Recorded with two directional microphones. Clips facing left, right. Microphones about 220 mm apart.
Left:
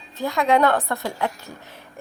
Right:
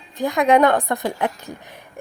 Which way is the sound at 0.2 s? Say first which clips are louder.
Right 3 dB; 15° right (ahead or behind).